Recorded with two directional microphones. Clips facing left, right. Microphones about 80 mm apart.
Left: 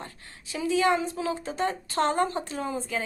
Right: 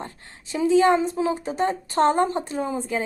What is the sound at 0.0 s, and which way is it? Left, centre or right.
A woman's voice, right.